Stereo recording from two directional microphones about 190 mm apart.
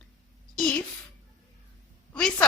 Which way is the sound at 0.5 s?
5° left (ahead or behind).